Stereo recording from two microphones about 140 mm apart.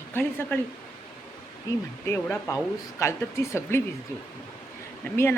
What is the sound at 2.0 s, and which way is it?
Speech, 20° left (ahead or behind).